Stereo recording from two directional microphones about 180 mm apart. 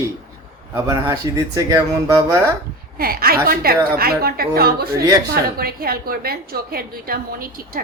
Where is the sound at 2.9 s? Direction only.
55° right (ahead or behind).